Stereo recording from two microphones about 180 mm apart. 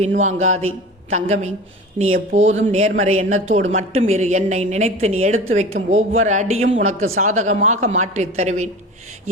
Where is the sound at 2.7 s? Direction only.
40° right (ahead or behind).